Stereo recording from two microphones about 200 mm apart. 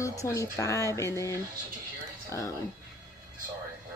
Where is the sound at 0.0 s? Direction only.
15° left (ahead or behind).